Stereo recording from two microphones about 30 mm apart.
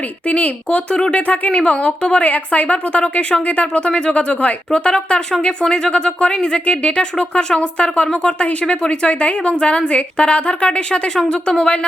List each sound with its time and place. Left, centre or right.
0.3 s speech: left
2.2 s a woman's voice: left
3.8 s a woman's voice: left
4.3 s speech: left
4.7 s a woman's voice: left
5.6 s speech: left
5.9 s a woman's voice: left